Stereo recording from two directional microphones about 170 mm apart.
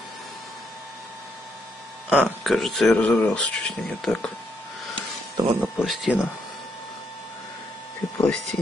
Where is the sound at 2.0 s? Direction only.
5° right (ahead or behind).